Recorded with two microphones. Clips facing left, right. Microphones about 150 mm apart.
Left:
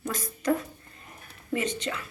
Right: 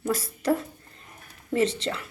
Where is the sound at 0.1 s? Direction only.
35° right (ahead or behind).